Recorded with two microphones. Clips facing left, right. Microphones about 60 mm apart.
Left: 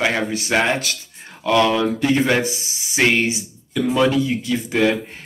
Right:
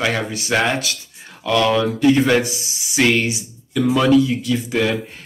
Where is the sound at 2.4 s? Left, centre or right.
Left.